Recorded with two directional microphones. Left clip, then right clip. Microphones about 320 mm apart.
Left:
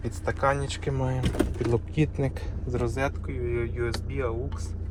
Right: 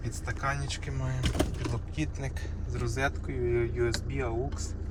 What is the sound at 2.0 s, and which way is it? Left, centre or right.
Speech, centre.